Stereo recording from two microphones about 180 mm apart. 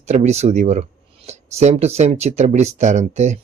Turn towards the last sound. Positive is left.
turn(degrees=-40)  # may be behind; listen again after turning